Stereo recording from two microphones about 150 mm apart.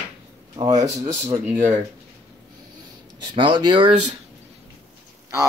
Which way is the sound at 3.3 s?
30° right (ahead or behind).